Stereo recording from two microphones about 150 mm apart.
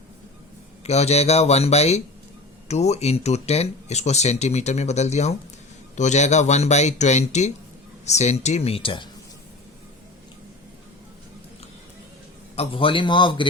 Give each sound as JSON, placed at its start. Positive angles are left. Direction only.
{"t": 0.9, "sound": "speech", "side_deg": 45}
{"t": 12.5, "sound": "a man's voice", "side_deg": 35}